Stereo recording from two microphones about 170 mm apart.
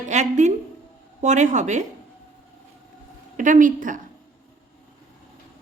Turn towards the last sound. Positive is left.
turn(degrees=-50)  # may be behind; listen again after turning